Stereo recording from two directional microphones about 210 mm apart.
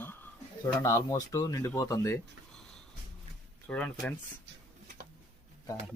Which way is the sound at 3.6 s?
5° left (ahead or behind).